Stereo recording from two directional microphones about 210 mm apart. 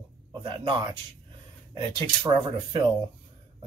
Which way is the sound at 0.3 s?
20° right (ahead or behind).